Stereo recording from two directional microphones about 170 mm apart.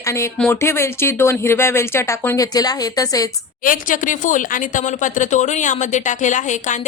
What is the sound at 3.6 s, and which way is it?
Speech, 50° left (ahead or behind).